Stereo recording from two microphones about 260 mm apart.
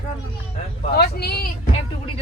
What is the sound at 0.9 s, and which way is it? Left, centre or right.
Speech, left.